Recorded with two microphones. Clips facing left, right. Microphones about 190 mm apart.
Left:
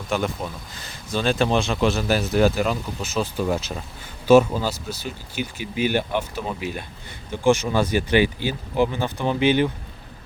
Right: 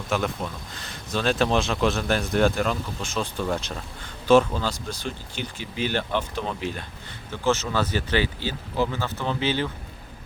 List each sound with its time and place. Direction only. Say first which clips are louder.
0.1 s speech: left 2 dB; centre (ahead or behind)